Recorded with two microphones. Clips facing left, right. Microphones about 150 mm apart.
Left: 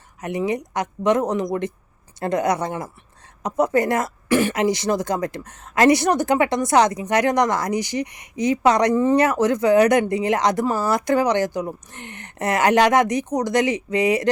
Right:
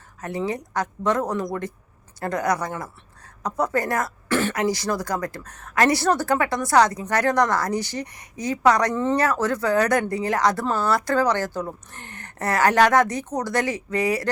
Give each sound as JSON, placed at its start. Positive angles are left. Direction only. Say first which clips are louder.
{"t": 0.2, "sound": "a woman's voice", "louder": "left 3 dB", "side_deg": 15}
{"t": 9.0, "sound": "a woman's voice", "louder": "left 4 dB", "side_deg": 10}